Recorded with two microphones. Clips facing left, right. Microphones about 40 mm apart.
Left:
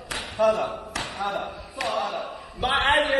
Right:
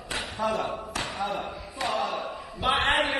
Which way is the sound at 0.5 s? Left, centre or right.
Centre.